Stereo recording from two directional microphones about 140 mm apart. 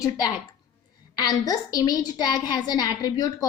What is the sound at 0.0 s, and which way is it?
A woman's voice, 30° left (ahead or behind).